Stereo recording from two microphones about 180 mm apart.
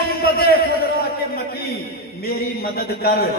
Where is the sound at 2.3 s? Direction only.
60° left (ahead or behind).